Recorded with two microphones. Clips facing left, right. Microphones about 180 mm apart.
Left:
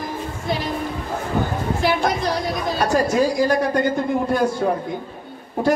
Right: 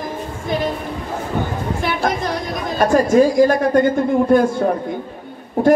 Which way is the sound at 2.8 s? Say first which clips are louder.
Right 6 dB; 50° right (ahead or behind).